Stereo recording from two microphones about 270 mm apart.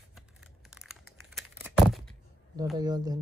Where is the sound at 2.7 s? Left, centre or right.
Centre.